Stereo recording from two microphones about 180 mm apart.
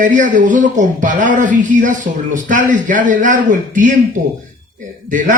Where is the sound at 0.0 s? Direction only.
45° right (ahead or behind).